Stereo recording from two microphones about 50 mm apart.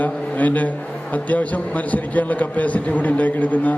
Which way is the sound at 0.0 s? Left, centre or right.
Left.